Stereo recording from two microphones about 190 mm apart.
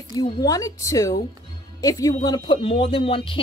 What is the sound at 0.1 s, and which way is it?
Speech, 20° left (ahead or behind).